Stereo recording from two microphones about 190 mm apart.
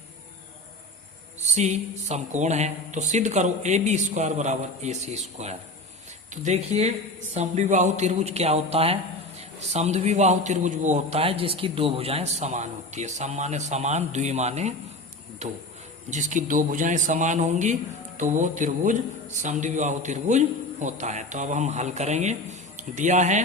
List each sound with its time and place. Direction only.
1.5 s a man's voice: 35° right (ahead or behind)